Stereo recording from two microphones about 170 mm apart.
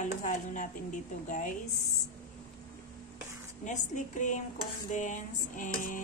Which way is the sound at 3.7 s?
45° left (ahead or behind).